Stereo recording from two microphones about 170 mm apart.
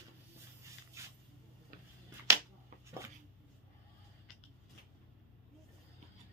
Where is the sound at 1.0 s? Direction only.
15° right (ahead or behind).